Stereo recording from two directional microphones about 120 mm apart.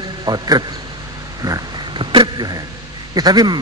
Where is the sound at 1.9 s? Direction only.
45° right (ahead or behind).